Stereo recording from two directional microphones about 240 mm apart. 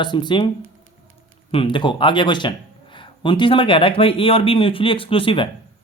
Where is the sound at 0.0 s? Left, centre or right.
Centre.